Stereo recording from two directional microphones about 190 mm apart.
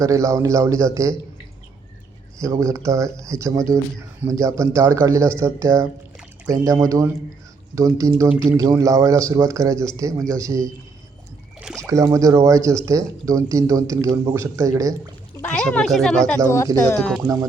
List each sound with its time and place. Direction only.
0.0 s speech: 15° right (ahead or behind)
2.4 s speech: 15° right (ahead or behind)
11.8 s speech: 15° right (ahead or behind)
15.4 s speech: 5° left (ahead or behind)